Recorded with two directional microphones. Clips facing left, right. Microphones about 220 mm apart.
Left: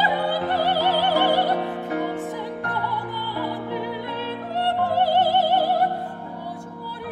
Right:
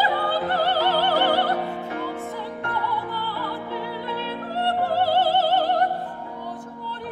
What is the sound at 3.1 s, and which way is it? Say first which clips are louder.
Music: left 2 dB; 15° left (ahead or behind).